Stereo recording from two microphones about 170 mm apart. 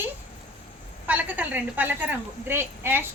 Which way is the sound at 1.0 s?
10° right (ahead or behind).